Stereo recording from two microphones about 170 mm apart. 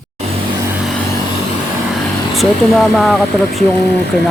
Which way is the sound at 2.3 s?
Centre (ahead or behind).